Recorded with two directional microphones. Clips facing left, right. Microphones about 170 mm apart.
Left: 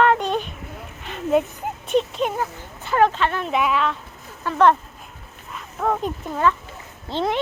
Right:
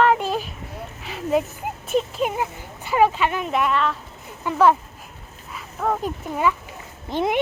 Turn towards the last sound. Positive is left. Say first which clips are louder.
# right 1 dB
turn(degrees=-15)  # may be behind; listen again after turning